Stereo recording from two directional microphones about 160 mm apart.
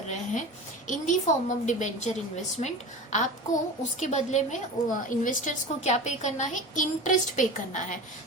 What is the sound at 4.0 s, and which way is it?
A woman's voice, 45° left (ahead or behind).